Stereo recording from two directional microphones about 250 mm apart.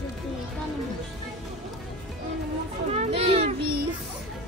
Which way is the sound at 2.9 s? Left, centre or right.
Right.